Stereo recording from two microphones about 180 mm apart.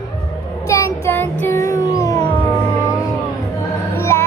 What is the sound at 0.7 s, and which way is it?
Child singing, 15° left (ahead or behind).